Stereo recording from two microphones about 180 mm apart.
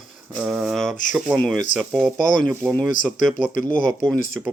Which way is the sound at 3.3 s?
45° left (ahead or behind).